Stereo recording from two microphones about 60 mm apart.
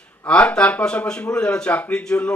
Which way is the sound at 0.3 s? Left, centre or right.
Centre.